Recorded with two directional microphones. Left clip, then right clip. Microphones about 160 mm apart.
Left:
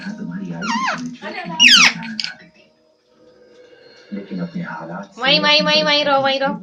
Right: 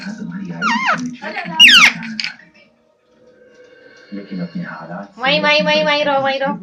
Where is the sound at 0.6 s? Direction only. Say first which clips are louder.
Right 5 dB; 20° right (ahead or behind).